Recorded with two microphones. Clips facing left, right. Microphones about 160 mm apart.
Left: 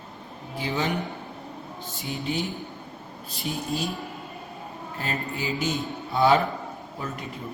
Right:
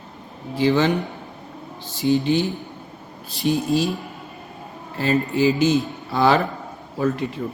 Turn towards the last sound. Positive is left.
turn(degrees=-90)